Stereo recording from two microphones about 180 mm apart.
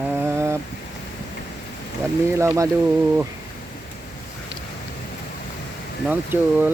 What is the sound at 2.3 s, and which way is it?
Speech, 15° right (ahead or behind).